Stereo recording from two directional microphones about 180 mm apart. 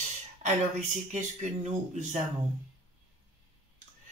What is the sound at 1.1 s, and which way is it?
Speech, 45° right (ahead or behind).